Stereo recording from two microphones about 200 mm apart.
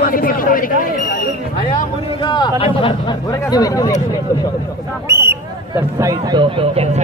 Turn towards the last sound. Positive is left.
turn(degrees=-30)  # may be behind; listen again after turning